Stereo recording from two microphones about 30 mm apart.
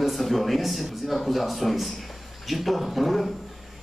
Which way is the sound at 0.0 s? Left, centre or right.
Centre.